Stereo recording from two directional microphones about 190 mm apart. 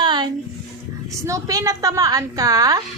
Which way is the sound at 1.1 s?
15° right (ahead or behind).